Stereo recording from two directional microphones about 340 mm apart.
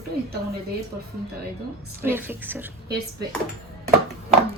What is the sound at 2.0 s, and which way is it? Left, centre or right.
Speech, centre.